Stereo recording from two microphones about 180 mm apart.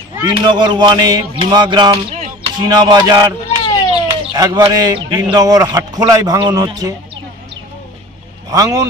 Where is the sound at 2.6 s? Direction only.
25° right (ahead or behind).